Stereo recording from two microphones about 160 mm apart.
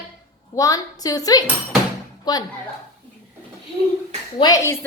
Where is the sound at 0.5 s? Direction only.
20° left (ahead or behind).